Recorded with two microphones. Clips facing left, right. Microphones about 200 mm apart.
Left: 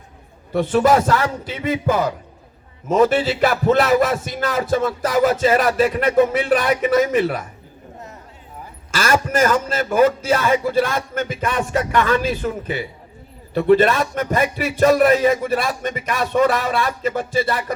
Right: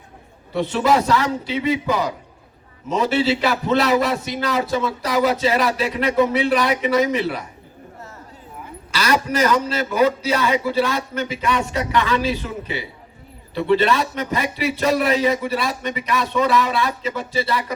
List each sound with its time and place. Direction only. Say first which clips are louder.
0.5 s speech: left 3 dB; 50° left (ahead or behind)
8.9 s speech: left 1 dB; 50° left (ahead or behind)